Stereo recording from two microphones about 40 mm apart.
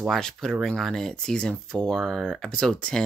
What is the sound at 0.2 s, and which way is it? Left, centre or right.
Speech, centre.